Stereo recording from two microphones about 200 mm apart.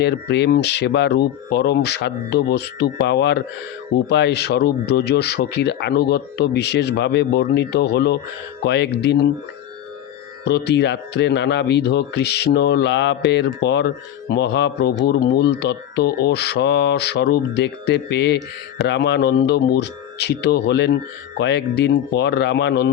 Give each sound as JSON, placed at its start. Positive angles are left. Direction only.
{"t": 0.0, "sound": "speech", "side_deg": 60}
{"t": 10.4, "sound": "speech", "side_deg": 60}